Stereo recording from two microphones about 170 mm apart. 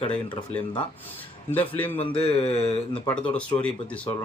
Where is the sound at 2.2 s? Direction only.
35° left (ahead or behind).